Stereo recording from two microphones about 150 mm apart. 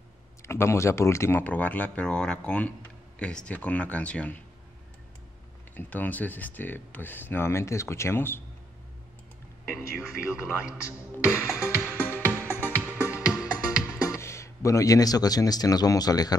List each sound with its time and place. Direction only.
0.4 s speech: 20° left (ahead or behind)
5.8 s speech: 10° left (ahead or behind)
9.9 s speech: 5° right (ahead or behind)
11.2 s music: 5° right (ahead or behind)
12.0 s music: 15° left (ahead or behind)
12.8 s music: 10° right (ahead or behind)
14.1 s speech: 20° left (ahead or behind)